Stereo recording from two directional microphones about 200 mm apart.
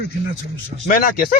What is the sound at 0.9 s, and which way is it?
Speech, 45° left (ahead or behind).